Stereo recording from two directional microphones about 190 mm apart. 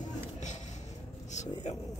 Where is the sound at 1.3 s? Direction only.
40° left (ahead or behind).